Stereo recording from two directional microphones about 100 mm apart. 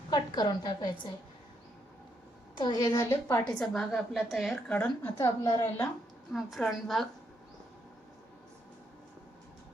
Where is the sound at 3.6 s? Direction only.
5° left (ahead or behind).